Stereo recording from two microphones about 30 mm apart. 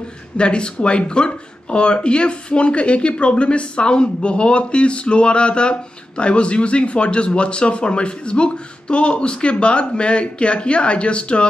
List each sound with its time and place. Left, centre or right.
0.4 s speech: left